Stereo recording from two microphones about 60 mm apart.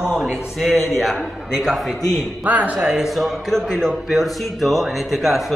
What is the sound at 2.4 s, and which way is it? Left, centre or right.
Speech, right.